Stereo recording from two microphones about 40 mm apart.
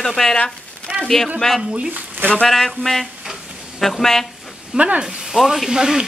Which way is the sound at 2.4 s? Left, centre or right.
Centre.